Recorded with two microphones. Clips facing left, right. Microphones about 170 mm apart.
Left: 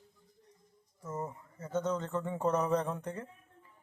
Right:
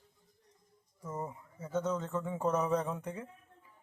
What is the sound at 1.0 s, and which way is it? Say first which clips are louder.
Speech: left 1 dB; 10° right (ahead or behind).